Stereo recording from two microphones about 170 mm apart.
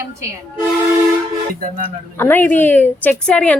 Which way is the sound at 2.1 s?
10° left (ahead or behind).